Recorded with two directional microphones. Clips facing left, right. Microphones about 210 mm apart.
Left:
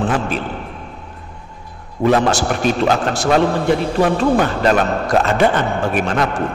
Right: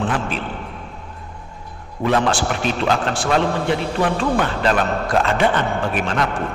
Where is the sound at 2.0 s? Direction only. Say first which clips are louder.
Left 4 dB; 40° left (ahead or behind).